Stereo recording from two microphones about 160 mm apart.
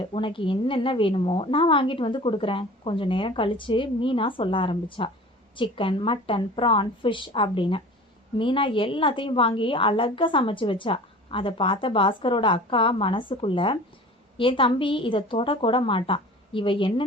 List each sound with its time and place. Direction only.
0.0 s a woman's voice: 35° left (ahead or behind)